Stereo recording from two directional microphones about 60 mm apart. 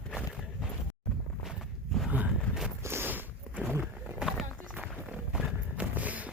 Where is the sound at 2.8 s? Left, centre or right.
Right.